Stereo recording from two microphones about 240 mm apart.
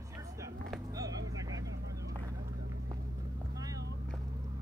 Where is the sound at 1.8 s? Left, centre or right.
Right.